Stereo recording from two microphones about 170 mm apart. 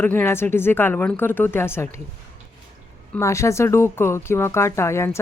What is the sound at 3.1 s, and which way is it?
Speech, 15° left (ahead or behind).